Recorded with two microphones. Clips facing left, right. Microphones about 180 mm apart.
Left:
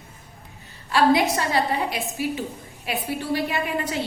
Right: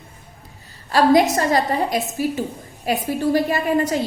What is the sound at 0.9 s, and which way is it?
A woman's voice, 45° right (ahead or behind).